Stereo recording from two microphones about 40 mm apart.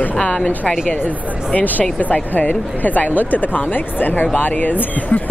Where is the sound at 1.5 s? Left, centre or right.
Left.